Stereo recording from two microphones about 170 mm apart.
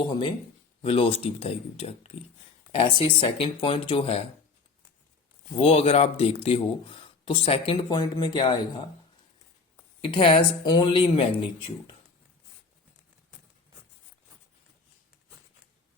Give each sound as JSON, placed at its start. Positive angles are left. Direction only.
{"t": 0.8, "sound": "speech", "side_deg": 35}
{"t": 5.5, "sound": "speech", "side_deg": 40}
{"t": 10.0, "sound": "speech", "side_deg": 30}